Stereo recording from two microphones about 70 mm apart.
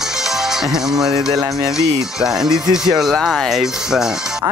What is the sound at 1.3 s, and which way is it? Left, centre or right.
Speech, right.